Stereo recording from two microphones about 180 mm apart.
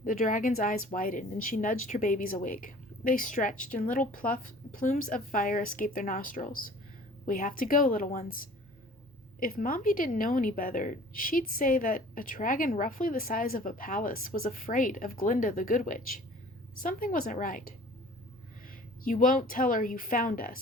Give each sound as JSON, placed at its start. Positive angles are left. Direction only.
{"t": 0.0, "sound": "a woman's voice", "side_deg": 50}